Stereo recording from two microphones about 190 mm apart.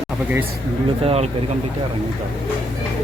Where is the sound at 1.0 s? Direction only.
35° right (ahead or behind).